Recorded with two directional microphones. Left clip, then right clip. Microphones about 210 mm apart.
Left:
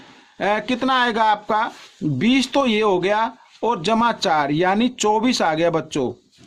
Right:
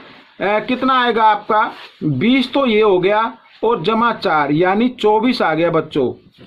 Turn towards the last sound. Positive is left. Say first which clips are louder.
# right 4 dB
turn(degrees=40)  # may be behind; listen again after turning